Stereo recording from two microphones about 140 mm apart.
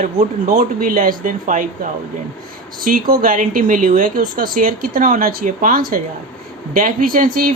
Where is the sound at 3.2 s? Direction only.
75° right (ahead or behind); by 7.5 s 90° right.